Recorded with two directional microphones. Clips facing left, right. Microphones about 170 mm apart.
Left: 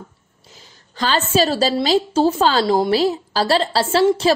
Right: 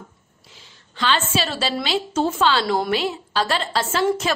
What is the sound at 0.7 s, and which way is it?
A woman's voice, 40° left (ahead or behind).